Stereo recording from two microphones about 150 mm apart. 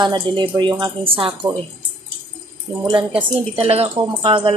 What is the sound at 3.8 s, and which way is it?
Speech, 30° right (ahead or behind).